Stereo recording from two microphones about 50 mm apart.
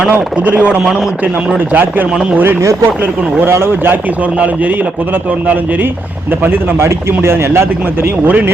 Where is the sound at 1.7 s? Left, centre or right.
Right.